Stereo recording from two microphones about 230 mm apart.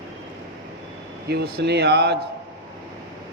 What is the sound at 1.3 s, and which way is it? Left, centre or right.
Speech, right.